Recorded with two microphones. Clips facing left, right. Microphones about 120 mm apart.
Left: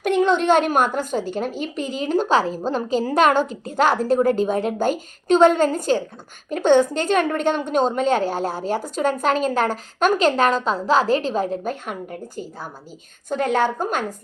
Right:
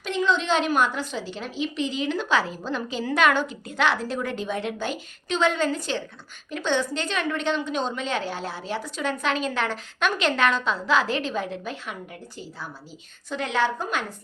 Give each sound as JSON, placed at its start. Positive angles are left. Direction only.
{"t": 0.0, "sound": "a woman's voice", "side_deg": 55}